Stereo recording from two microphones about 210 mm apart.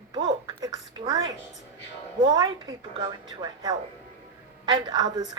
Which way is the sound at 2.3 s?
20° right (ahead or behind).